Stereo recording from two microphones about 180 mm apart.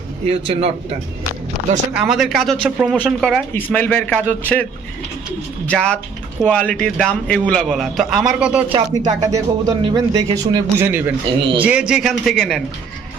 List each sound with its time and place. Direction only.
0.3 s speech: 35° right (ahead or behind)
1.9 s a man's voice: 5° right (ahead or behind)
5.6 s a man's voice: 5° left (ahead or behind)
8.7 s speech: 20° right (ahead or behind)
10.8 s a man's voice: 10° right (ahead or behind)